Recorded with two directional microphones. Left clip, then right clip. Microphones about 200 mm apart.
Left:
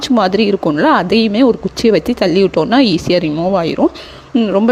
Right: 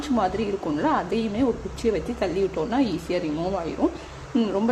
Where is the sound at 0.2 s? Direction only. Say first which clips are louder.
Left 12 dB; 45° left (ahead or behind).